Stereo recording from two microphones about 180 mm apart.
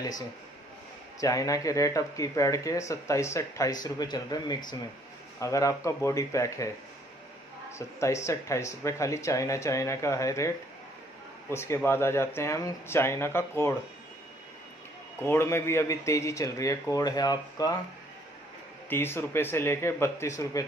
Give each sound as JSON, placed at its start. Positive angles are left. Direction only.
{"t": 1.2, "sound": "speech", "side_deg": 20}
{"t": 7.7, "sound": "speech", "side_deg": 15}
{"t": 11.5, "sound": "speech", "side_deg": 15}
{"t": 15.2, "sound": "speech", "side_deg": 15}
{"t": 18.9, "sound": "speech", "side_deg": 10}